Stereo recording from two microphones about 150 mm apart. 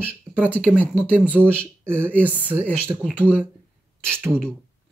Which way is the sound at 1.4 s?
10° left (ahead or behind).